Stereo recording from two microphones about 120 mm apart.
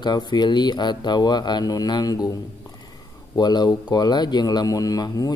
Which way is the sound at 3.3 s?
35° left (ahead or behind).